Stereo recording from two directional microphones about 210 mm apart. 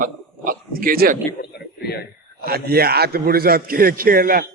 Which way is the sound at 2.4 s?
45° right (ahead or behind).